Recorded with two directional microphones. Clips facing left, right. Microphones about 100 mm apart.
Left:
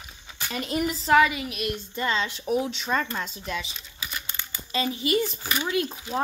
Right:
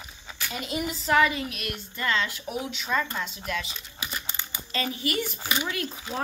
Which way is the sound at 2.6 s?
35° left (ahead or behind).